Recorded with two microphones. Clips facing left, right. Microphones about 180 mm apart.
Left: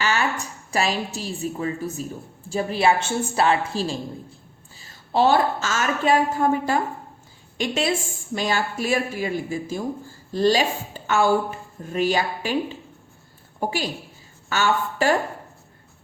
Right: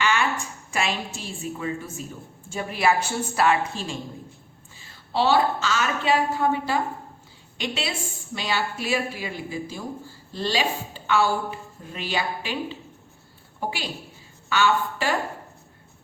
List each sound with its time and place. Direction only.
0.0 s a woman's voice: 40° left (ahead or behind)
4.8 s a woman's voice: 45° left (ahead or behind)